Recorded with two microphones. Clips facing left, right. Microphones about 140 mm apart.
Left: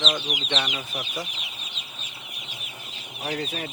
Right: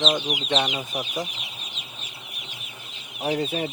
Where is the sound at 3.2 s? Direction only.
20° right (ahead or behind).